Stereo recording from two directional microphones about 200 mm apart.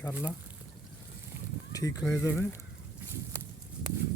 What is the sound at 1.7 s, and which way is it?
Speech, 15° left (ahead or behind).